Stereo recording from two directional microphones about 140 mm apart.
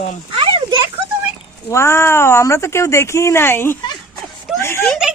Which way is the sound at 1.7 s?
20° left (ahead or behind).